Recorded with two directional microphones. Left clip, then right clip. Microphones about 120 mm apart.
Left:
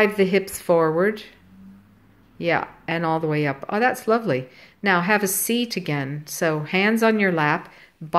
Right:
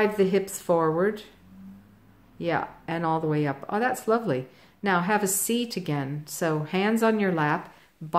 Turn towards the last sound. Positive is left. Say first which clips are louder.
# left 5 dB
turn(degrees=5)  # may be behind; listen again after turning